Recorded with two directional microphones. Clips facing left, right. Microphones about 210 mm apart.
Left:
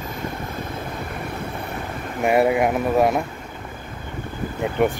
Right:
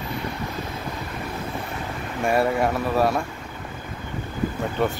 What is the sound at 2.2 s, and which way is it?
Speech, 20° left (ahead or behind).